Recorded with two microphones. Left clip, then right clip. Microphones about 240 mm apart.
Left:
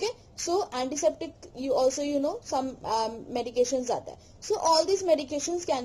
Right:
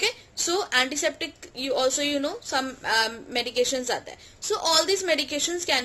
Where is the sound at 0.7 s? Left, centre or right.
Centre.